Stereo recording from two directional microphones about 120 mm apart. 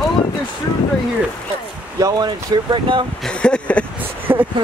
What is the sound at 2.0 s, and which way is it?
Speech, 35° right (ahead or behind).